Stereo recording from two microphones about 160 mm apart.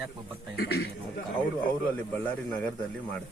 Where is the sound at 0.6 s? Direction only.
90° left.